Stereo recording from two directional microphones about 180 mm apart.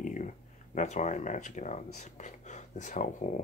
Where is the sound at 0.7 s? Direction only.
40° left (ahead or behind).